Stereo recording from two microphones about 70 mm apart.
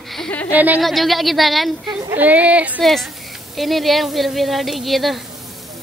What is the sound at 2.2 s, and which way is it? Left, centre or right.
Speech, right.